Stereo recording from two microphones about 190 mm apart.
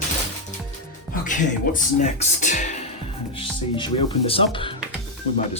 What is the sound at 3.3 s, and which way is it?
Speech, 25° left (ahead or behind).